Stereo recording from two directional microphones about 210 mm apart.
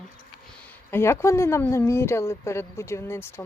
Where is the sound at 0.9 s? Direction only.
10° left (ahead or behind).